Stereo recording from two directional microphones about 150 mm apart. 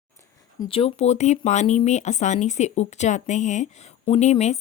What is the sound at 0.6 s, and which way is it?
Speech, 40° left (ahead or behind).